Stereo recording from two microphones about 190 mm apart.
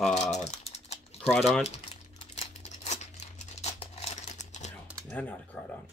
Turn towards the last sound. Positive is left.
turn(degrees=10)  # may be behind; listen again after turning